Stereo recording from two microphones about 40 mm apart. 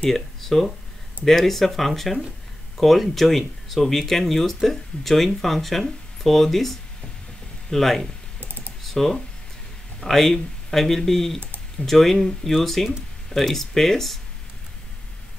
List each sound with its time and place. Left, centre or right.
0.1 s speech: centre
8.4 s typing: right
8.8 s speech: centre